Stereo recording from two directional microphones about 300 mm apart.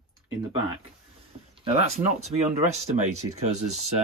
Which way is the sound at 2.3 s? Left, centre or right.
Right.